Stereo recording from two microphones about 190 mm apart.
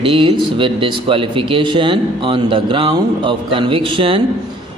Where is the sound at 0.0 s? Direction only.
25° right (ahead or behind).